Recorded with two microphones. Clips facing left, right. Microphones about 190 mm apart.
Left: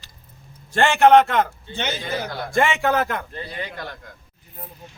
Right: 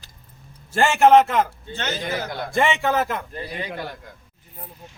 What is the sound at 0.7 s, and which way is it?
Speech, 5° right (ahead or behind).